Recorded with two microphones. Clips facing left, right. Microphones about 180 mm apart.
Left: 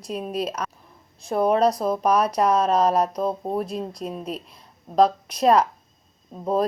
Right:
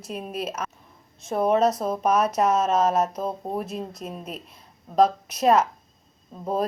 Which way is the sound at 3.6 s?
30° left (ahead or behind).